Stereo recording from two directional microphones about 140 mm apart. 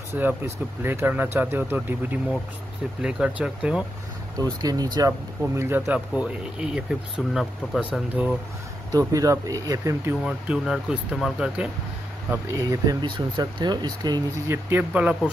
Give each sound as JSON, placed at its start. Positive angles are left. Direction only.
{"t": 0.1, "sound": "speech", "side_deg": -15}
{"t": 4.4, "sound": "speech", "side_deg": -30}
{"t": 5.6, "sound": "speech", "side_deg": -15}
{"t": 5.9, "sound": "speech", "side_deg": -5}
{"t": 8.9, "sound": "speech", "side_deg": -25}
{"t": 10.2, "sound": "speech", "side_deg": -5}
{"t": 12.3, "sound": "speech", "side_deg": -20}
{"t": 14.5, "sound": "speech", "side_deg": -15}